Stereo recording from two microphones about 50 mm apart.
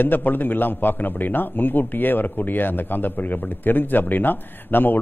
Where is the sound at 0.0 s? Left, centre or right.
Left.